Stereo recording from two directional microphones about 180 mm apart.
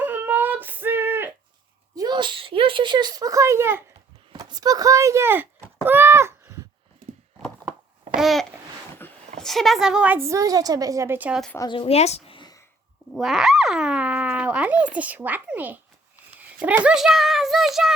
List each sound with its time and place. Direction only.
0.0 s a sound: 10° right (ahead or behind)
2.0 s speech: 25° right (ahead or behind)
4.3 s a sound: 25° right (ahead or behind)
8.1 s babbling: centre (ahead or behind)
9.4 s a woman's voice: centre (ahead or behind)
11.5 s a woman's voice: 25° left (ahead or behind)
12.4 s whispering: 20° left (ahead or behind)
13.1 s a child's voice: centre (ahead or behind)